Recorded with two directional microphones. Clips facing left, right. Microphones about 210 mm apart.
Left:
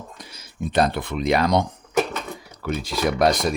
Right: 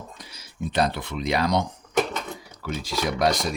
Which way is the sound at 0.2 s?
50° left (ahead or behind).